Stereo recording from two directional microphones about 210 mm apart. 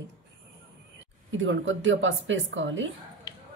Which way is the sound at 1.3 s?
65° right (ahead or behind).